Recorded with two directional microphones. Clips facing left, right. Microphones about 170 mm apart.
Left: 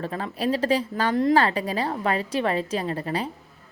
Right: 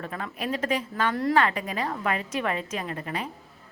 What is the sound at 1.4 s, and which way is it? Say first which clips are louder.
A woman's voice: left 2 dB; 30° left (ahead or behind).